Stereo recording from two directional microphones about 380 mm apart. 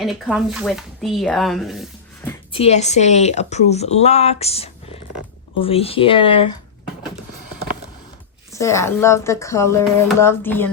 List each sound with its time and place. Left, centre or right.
0.0 s speech: centre
2.5 s a woman's voice: centre
8.5 s a woman's voice: centre